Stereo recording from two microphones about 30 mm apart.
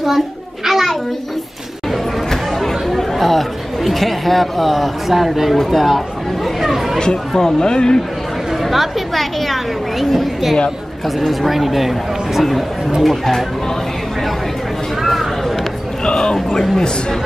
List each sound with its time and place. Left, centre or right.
0.7 s a sound: centre
2.6 s speech: centre
6.6 s chatter: centre
7.0 s speech: left
8.6 s a woman's voice: centre